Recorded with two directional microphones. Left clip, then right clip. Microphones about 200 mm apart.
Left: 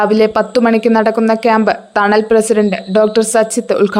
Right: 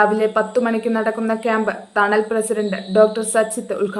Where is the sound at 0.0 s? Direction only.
50° left (ahead or behind).